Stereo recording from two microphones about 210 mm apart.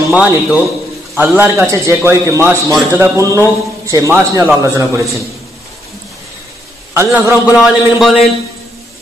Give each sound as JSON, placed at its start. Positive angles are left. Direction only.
{"t": 0.1, "sound": "a man's voice", "side_deg": -5}
{"t": 6.9, "sound": "a man's voice", "side_deg": -10}